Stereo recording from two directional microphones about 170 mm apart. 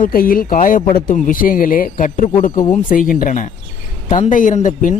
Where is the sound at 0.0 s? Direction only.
60° left (ahead or behind).